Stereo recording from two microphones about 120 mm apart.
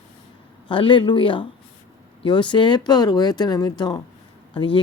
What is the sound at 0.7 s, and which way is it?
Speech, 45° left (ahead or behind).